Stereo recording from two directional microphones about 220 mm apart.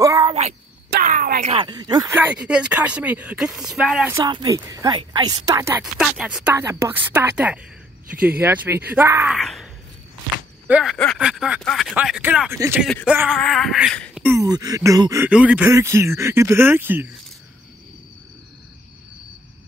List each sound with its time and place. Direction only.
0.0 s a sound: 15° right (ahead or behind)
0.3 s a sound: 30° right (ahead or behind)
0.8 s a sound: 40° right (ahead or behind)
1.5 s speech: 20° right (ahead or behind); by 4.2 s 5° right (ahead or behind)
4.2 s speech: 20° right (ahead or behind)
5.9 s speech: 5° right (ahead or behind)
9.4 s speech: centre (ahead or behind)
10.7 s speech: centre (ahead or behind)
14.2 s speech: 15° right (ahead or behind)